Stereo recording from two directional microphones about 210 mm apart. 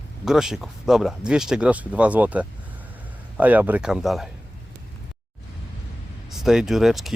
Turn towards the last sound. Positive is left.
turn(degrees=0)  # may be behind; listen again after turning